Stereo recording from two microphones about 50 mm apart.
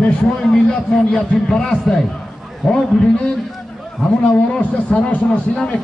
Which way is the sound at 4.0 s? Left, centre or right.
Left.